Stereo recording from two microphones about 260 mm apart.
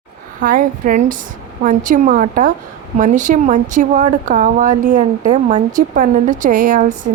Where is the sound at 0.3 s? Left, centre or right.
Right.